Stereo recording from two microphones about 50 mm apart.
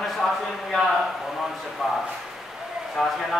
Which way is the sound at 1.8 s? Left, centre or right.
Centre.